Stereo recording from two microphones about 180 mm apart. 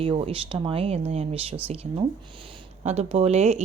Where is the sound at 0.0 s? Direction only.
30° right (ahead or behind).